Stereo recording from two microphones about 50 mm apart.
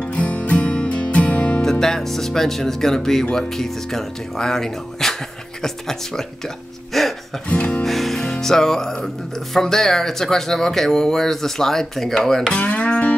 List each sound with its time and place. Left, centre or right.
0.0 s music: left
1.6 s music: centre
6.9 s speech: centre
7.4 s speech: left
7.8 s music: centre
12.5 s speech: left